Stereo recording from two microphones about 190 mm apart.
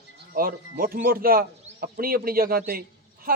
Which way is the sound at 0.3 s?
50° right (ahead or behind).